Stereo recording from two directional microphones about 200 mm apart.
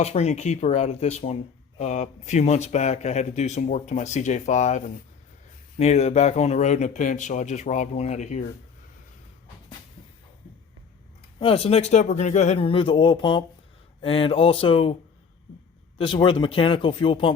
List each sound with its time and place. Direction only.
0.0 s speech: 35° left (ahead or behind)
11.3 s speech: 30° left (ahead or behind)
16.0 s speech: 25° left (ahead or behind)